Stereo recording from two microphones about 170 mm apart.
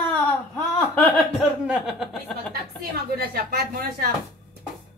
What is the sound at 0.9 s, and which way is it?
A woman's voice, 5° left (ahead or behind).